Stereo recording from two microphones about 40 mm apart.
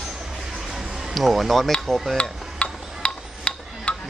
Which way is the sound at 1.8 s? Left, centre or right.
Centre.